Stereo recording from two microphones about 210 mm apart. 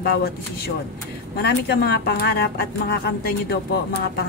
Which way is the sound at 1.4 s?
50° left (ahead or behind).